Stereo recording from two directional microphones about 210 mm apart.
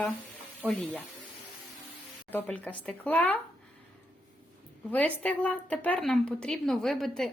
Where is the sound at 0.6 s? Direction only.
Centre (ahead or behind).